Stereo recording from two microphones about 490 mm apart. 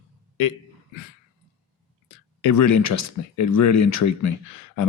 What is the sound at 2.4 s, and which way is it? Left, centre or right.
Speech, left.